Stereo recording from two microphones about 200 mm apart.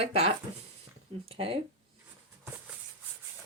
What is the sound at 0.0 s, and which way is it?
Speech, 30° right (ahead or behind).